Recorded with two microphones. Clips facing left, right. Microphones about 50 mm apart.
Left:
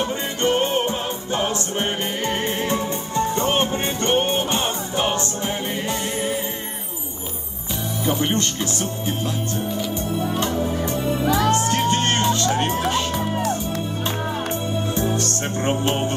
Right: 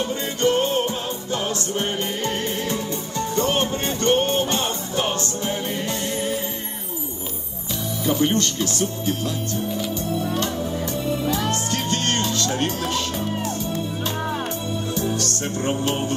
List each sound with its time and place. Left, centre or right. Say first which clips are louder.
0.1 s music: even; left
8.0 s speech: right 1 dB; centre
10.2 s music: left 2 dB; centre
14.9 s music: left 2 dB; left